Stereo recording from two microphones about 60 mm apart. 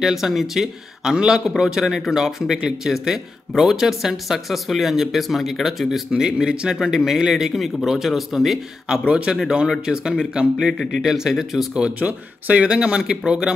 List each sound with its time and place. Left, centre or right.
0.0 s speech: centre
8.8 s speech: centre
11.7 s speech: right